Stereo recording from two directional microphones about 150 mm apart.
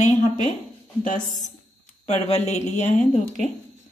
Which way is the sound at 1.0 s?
60° left (ahead or behind).